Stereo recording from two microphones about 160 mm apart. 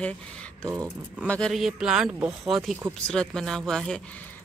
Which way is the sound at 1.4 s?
Centre (ahead or behind).